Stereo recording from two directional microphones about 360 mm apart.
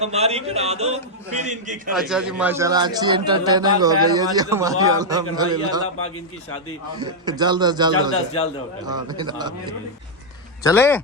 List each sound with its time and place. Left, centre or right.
0.0 s a man's voice: centre
1.9 s a man's voice: centre
7.0 s a man's voice: centre
10.6 s speech: centre